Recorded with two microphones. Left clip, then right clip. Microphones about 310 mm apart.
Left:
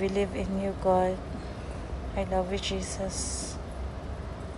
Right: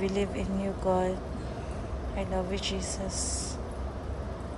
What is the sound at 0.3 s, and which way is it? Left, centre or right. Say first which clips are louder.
Speech: left 1 dB; right.